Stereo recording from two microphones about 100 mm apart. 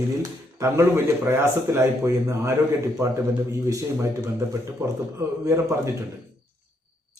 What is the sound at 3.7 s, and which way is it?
Speech, 30° right (ahead or behind).